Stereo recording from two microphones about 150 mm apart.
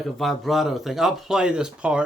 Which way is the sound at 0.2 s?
Centre (ahead or behind).